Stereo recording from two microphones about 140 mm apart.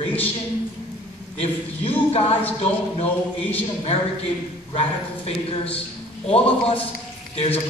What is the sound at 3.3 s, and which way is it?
Speech, 10° left (ahead or behind).